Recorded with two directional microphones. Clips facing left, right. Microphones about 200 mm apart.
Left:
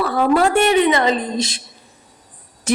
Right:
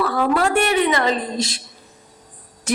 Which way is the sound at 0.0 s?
25° left (ahead or behind).